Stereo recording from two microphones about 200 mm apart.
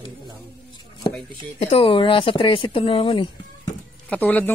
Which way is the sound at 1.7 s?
25° left (ahead or behind).